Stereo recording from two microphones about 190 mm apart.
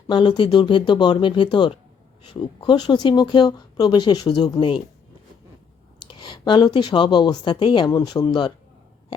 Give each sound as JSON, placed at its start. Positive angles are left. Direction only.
{"t": 0.1, "sound": "speech", "side_deg": 25}
{"t": 6.0, "sound": "speech", "side_deg": 25}